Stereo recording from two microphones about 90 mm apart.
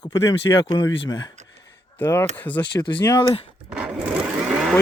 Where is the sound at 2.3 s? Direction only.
20° left (ahead or behind).